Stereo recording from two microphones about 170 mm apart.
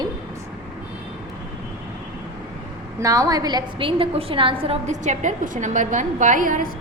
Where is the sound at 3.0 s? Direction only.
20° right (ahead or behind).